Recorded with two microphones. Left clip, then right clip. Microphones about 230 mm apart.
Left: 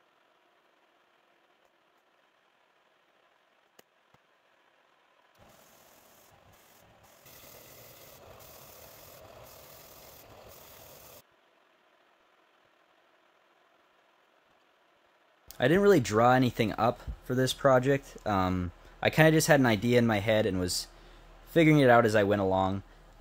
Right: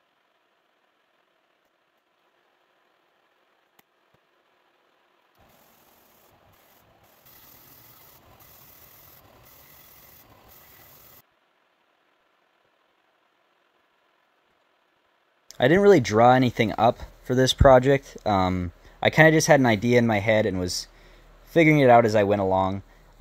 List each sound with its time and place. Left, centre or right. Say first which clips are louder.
15.4 s speech: right 6 dB; right